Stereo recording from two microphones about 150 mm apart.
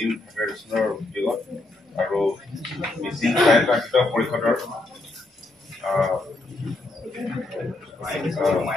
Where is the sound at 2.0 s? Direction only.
Centre (ahead or behind).